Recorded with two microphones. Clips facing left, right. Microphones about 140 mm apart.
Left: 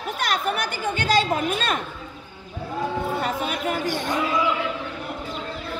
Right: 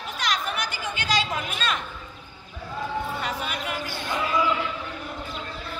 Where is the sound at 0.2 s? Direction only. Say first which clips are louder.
Left 3 dB; 55° left (ahead or behind).